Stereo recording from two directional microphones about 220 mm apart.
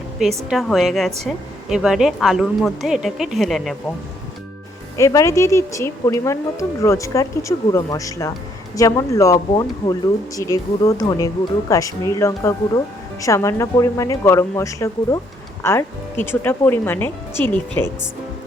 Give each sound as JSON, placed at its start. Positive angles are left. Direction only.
{"t": 0.5, "sound": "speech", "side_deg": 0}
{"t": 4.9, "sound": "speech", "side_deg": 15}